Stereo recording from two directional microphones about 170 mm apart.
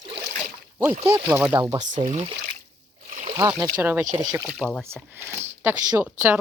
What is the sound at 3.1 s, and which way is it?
Splash, 50° right (ahead or behind).